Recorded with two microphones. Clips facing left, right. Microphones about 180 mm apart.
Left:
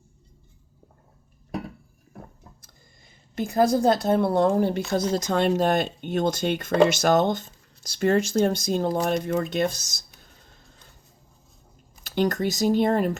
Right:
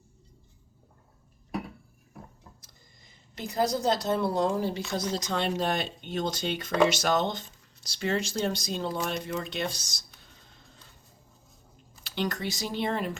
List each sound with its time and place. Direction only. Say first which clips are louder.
3.3 s speech: left 7 dB; 50° left (ahead or behind)
12.0 s speech: left 8 dB; 45° left (ahead or behind)